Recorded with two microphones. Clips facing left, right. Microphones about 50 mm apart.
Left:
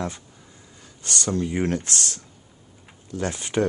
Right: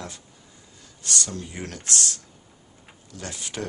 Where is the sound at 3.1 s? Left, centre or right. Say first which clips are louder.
Left 10 dB; left.